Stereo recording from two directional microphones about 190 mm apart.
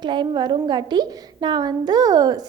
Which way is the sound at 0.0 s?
25° right (ahead or behind).